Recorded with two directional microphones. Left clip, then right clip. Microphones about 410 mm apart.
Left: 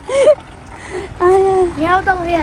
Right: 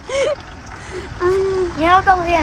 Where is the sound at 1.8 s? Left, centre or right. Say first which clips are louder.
Right 2 dB; right.